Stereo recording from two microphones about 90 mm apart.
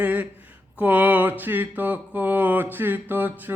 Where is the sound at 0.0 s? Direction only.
20° right (ahead or behind).